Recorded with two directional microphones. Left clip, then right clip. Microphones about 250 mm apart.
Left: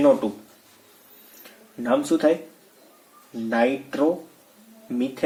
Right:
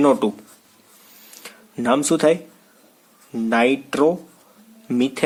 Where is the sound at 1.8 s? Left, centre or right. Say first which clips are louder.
Right 3 dB; right.